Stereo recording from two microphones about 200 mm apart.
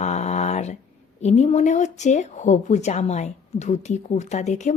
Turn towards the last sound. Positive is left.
turn(degrees=35)  # may be behind; listen again after turning